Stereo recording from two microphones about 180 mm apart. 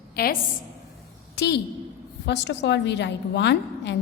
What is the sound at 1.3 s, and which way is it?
A woman's voice, 65° left (ahead or behind).